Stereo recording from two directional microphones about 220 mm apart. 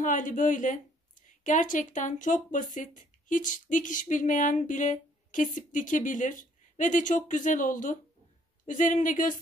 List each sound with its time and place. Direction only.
0.0 s a woman's voice: 35° left (ahead or behind)